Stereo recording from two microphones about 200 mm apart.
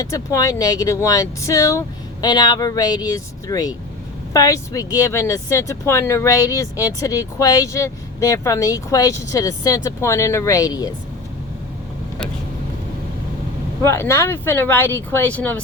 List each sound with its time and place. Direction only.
0.0 s speech: 15° left (ahead or behind)
13.8 s speech: 15° left (ahead or behind)